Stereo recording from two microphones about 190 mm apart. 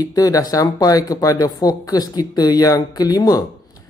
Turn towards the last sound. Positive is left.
turn(degrees=20)  # may be behind; listen again after turning